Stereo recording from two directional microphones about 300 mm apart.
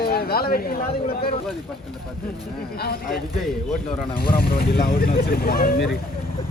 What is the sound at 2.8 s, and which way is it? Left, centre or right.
Speech, left.